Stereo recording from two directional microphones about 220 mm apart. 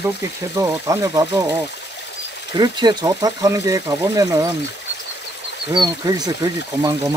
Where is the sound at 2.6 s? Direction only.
20° right (ahead or behind).